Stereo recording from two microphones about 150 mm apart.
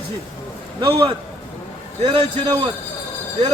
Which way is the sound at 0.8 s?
30° right (ahead or behind).